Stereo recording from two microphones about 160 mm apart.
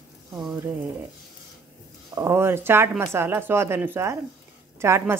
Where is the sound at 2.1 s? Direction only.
15° right (ahead or behind).